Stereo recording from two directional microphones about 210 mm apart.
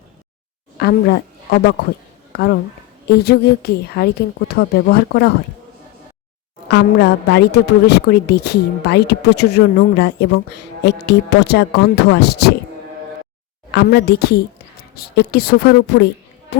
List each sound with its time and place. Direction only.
0.8 s a woman's voice: 50° left (ahead or behind)
3.1 s a woman's voice: 50° left (ahead or behind)
6.7 s a woman's voice: 55° left (ahead or behind)
13.7 s a woman's voice: 50° left (ahead or behind)